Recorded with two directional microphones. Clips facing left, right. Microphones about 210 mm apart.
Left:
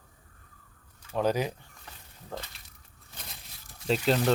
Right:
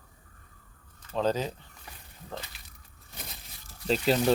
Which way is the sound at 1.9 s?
10° right (ahead or behind).